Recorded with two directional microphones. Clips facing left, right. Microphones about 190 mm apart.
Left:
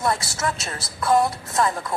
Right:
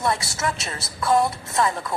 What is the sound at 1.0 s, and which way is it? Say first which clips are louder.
Speech: left 1 dB; centre (ahead or behind).